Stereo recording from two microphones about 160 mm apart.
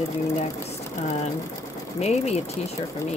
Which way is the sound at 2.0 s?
40° left (ahead or behind).